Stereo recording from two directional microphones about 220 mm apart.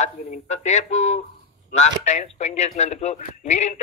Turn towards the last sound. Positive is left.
turn(degrees=30)  # may be behind; listen again after turning